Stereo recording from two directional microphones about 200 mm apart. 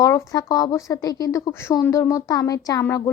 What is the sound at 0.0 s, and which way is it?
Speech, 15° left (ahead or behind).